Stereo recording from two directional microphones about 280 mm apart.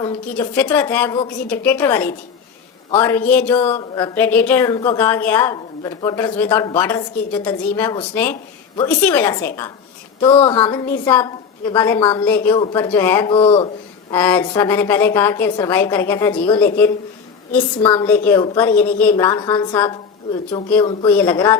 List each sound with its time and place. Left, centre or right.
0.0 s speech: centre
10.2 s speech: centre
11.9 s speech: centre
12.2 s speech: centre
14.1 s speech: centre
17.6 s speech: centre
17.9 s speech: centre